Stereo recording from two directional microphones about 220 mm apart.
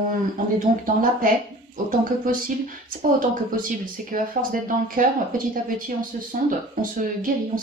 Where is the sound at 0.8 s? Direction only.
40° right (ahead or behind).